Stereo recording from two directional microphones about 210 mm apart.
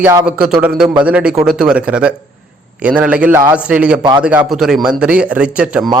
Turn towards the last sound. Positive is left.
turn(degrees=-5)  # may be behind; listen again after turning